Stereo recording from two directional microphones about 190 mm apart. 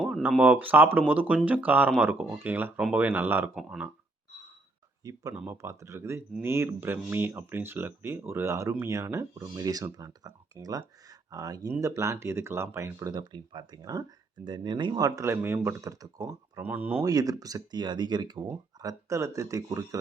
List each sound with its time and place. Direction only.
0.0 s speech: centre (ahead or behind)
5.0 s speech: 15° right (ahead or behind)